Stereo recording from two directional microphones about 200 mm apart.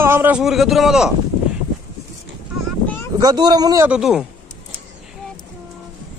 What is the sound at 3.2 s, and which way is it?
Speech, 20° right (ahead or behind).